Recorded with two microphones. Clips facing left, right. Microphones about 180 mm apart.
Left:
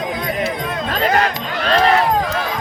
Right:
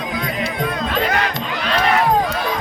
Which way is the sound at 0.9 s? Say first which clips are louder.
Left 7 dB; 40° left (ahead or behind).